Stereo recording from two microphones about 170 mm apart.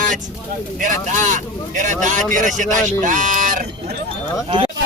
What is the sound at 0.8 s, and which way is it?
Speech, 50° right (ahead or behind).